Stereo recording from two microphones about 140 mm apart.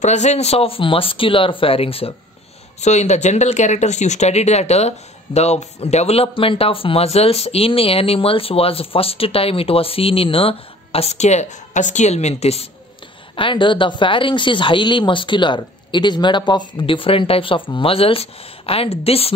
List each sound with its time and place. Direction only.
0.0 s speech: 55° left (ahead or behind)
2.8 s speech: 55° left (ahead or behind)
13.4 s speech: 35° left (ahead or behind)